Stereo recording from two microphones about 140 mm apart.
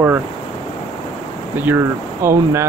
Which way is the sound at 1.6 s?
20° right (ahead or behind).